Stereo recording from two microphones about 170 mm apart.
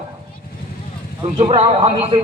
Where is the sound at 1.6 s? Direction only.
35° right (ahead or behind).